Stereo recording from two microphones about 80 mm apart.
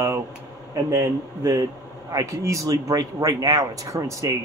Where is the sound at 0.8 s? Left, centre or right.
Right.